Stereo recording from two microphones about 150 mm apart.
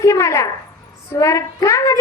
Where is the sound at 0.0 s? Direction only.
20° left (ahead or behind).